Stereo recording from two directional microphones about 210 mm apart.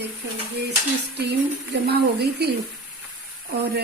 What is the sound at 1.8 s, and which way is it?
Speech, 50° right (ahead or behind).